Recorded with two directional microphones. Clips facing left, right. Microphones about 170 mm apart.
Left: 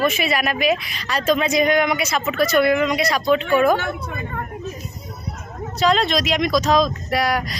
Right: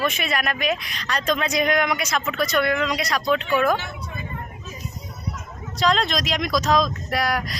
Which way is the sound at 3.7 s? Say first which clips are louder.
Left 5 dB; 55° left (ahead or behind).